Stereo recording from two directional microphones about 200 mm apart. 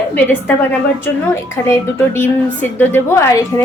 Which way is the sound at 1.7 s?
10° left (ahead or behind).